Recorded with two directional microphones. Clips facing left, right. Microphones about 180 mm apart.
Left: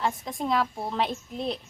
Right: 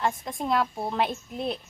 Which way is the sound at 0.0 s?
Centre (ahead or behind).